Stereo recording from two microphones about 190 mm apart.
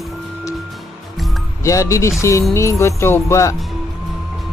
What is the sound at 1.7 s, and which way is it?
Speech, 15° left (ahead or behind).